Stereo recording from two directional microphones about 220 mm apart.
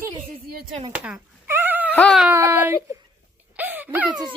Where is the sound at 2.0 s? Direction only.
Centre (ahead or behind).